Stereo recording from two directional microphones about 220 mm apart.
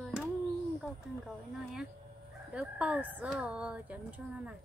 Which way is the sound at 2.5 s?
5° right (ahead or behind).